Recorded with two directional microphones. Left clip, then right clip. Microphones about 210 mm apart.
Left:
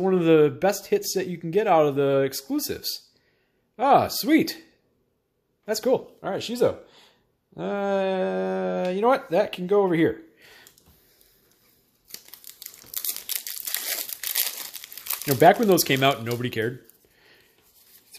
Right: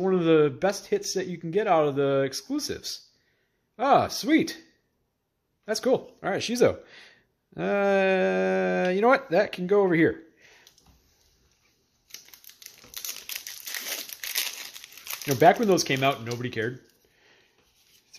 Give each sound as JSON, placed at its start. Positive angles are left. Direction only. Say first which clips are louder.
{"t": 0.0, "sound": "speech", "louder": "left 3 dB", "side_deg": 5}
{"t": 5.7, "sound": "speech", "louder": "left 2 dB", "side_deg": -5}
{"t": 6.1, "sound": "speech", "louder": "right 1 dB", "side_deg": -20}
{"t": 10.3, "sound": "a sound", "louder": "left 4 dB", "side_deg": 15}
{"t": 12.1, "sound": "crumpling", "louder": "left 2 dB", "side_deg": 10}
{"t": 15.0, "sound": "speech", "louder": "left 2 dB", "side_deg": 5}
{"t": 17.2, "sound": "a sound", "louder": "left 4 dB", "side_deg": 10}